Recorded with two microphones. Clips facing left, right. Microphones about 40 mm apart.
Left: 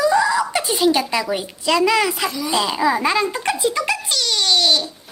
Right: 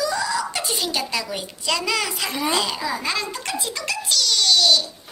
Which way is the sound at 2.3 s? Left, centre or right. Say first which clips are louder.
Even; right.